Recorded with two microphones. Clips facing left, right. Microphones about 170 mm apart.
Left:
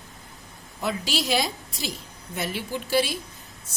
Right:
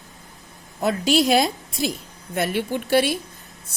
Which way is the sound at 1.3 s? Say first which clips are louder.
Right 6 dB; 55° right (ahead or behind).